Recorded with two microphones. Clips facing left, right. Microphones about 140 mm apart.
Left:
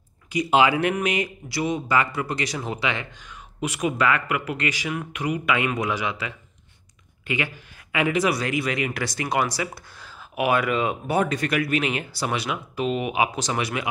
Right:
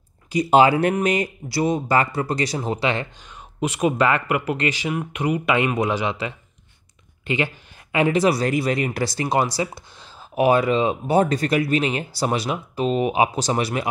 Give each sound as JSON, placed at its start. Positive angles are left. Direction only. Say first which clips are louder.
{"t": 0.3, "sound": "speech", "louder": "right 4 dB", "side_deg": -35}